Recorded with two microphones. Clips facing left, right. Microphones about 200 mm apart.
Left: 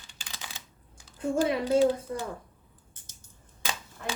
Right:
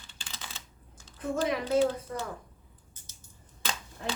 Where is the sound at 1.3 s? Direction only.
15° left (ahead or behind).